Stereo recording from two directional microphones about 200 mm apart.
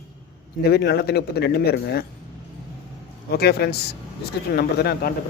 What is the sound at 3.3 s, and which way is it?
Speech, 55° left (ahead or behind).